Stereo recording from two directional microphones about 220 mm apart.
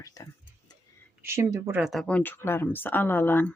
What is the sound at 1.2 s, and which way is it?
Speech, 10° right (ahead or behind).